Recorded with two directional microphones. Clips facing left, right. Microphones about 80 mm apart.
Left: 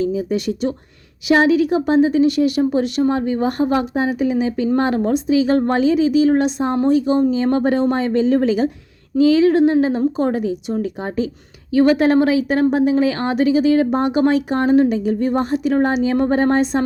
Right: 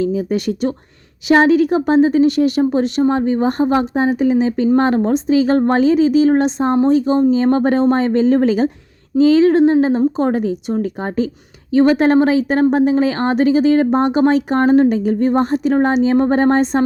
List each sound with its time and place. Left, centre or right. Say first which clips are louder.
0.0 s speech: right 2 dB; right